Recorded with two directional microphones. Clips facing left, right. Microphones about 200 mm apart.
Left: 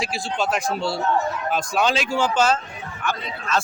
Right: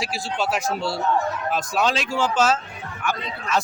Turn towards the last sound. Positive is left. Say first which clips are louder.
# even
turn(degrees=-10)  # may be behind; listen again after turning